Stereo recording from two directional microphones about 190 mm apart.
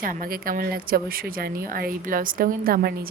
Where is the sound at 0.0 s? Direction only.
45° right (ahead or behind).